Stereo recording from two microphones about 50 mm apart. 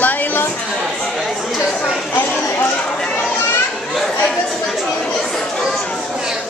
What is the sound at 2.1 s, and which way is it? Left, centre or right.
Speech, left.